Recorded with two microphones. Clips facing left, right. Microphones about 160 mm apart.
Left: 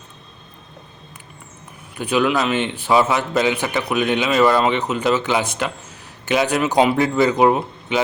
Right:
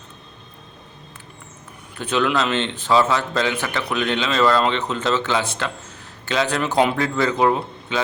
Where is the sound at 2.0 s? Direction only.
10° left (ahead or behind).